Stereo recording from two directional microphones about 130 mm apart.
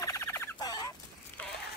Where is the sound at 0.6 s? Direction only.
30° left (ahead or behind).